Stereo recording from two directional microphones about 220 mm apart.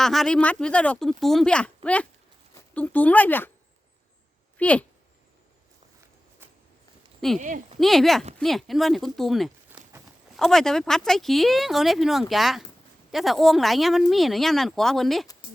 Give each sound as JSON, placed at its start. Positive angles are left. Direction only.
{"t": 0.0, "sound": "speech", "side_deg": 0}
{"t": 4.5, "sound": "speech", "side_deg": 5}
{"t": 7.3, "sound": "speech", "side_deg": -35}
{"t": 7.8, "sound": "speech", "side_deg": 0}